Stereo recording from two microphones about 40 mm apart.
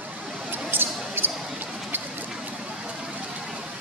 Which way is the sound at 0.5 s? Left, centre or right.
Right.